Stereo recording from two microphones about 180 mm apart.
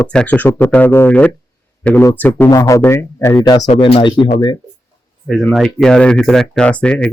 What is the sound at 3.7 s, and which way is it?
Speech, 35° left (ahead or behind).